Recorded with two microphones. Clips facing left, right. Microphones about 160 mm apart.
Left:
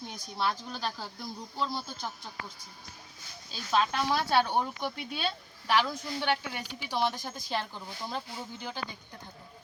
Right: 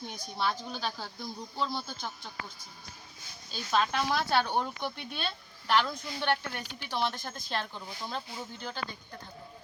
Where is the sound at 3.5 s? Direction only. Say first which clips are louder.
Left 1 dB; centre (ahead or behind).